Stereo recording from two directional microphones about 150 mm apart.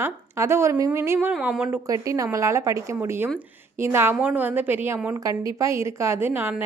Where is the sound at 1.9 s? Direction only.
20° right (ahead or behind).